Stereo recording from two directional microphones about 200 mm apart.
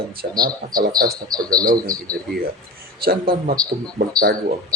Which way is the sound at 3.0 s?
50° right (ahead or behind).